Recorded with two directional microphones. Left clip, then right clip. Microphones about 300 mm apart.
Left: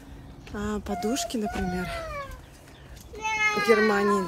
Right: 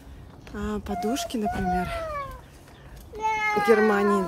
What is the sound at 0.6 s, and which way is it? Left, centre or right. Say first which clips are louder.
Speech: right 1 dB; centre.